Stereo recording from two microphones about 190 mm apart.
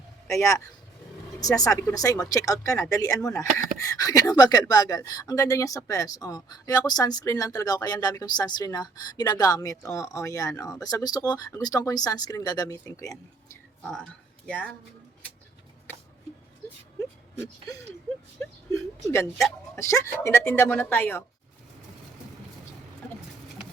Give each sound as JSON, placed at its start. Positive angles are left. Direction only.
{"t": 0.3, "sound": "speech", "side_deg": 15}
{"t": 13.8, "sound": "speech", "side_deg": 5}
{"t": 17.0, "sound": "a sound", "side_deg": 15}
{"t": 18.7, "sound": "speech", "side_deg": 15}